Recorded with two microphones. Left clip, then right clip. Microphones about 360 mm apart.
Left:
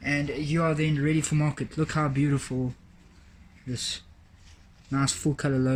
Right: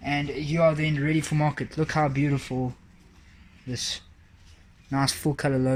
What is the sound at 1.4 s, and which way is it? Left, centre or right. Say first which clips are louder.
Speech: right 3 dB; centre.